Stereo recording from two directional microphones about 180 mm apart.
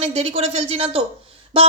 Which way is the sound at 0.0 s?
35° right (ahead or behind).